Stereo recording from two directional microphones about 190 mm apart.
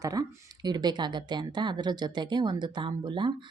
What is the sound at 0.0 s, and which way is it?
Speech, 20° right (ahead or behind).